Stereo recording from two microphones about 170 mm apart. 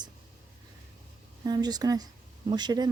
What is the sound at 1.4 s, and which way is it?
Speech, 25° right (ahead or behind).